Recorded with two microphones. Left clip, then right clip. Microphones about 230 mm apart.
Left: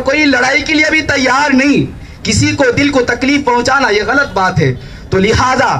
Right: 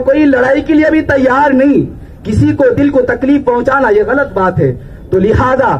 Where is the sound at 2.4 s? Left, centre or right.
Left.